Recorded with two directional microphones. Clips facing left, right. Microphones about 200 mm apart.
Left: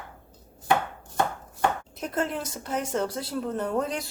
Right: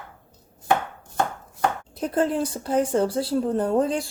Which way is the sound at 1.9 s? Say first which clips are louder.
Right 6 dB; 30° right (ahead or behind).